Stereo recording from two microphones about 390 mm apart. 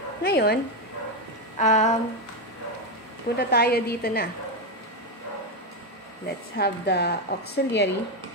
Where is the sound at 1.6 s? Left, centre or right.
Centre.